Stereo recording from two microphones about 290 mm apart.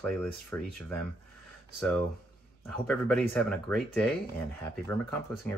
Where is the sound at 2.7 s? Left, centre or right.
Centre.